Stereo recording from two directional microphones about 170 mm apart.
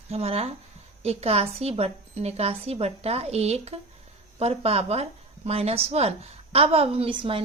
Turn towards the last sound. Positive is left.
turn(degrees=-30)  # may be behind; listen again after turning